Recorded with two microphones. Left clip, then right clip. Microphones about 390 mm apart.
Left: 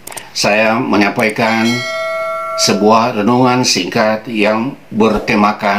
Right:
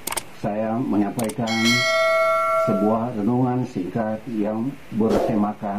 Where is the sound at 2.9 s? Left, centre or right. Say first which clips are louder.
Left 12 dB; centre.